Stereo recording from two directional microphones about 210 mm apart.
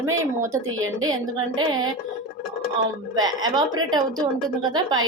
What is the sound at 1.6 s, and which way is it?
Speech, 20° right (ahead or behind).